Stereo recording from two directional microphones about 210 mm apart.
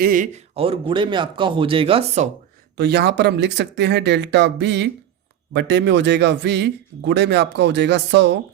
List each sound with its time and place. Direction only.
0.0 s speech: 40° right (ahead or behind)
2.7 s speech: 50° right (ahead or behind)